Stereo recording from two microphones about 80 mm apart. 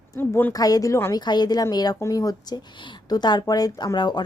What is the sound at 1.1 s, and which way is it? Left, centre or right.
Speech, left.